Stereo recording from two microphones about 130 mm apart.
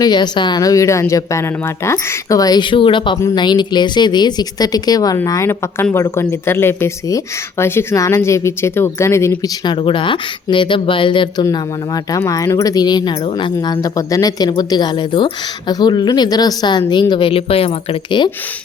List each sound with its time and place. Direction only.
0.0 s speech: 35° left (ahead or behind)
9.6 s speech: 40° left (ahead or behind)
12.1 s speech: 25° left (ahead or behind); by 17.7 s 45° left (ahead or behind)
18.2 s speech: 35° left (ahead or behind)